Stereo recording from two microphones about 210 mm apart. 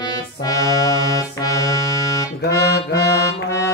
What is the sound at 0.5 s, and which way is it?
Accordion, 15° left (ahead or behind).